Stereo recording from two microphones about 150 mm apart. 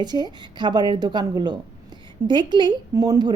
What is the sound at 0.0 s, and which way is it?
A woman's voice, 30° right (ahead or behind).